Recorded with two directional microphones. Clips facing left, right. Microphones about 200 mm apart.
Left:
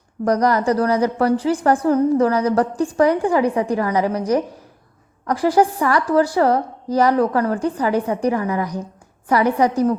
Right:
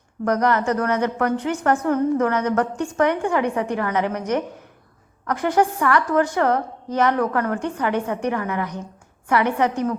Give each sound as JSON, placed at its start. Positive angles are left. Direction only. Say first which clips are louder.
{"t": 0.3, "sound": "a woman's voice", "louder": "left 3 dB", "side_deg": 35}